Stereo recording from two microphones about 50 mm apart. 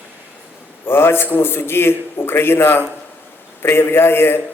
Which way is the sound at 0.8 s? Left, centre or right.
Left.